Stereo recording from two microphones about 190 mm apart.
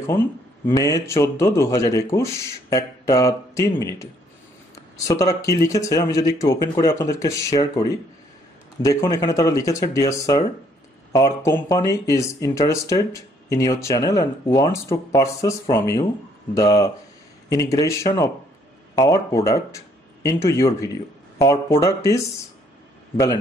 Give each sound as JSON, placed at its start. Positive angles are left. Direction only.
{"t": 0.0, "sound": "speech", "side_deg": 15}
{"t": 5.0, "sound": "speech", "side_deg": 20}